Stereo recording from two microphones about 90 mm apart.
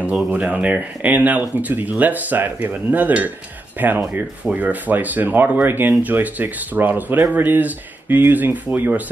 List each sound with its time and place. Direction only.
0.3 s speech: 15° right (ahead or behind)